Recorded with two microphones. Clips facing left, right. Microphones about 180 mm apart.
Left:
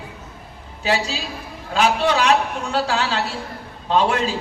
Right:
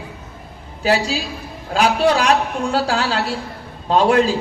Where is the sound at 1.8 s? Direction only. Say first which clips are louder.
Right 2 dB; 35° right (ahead or behind).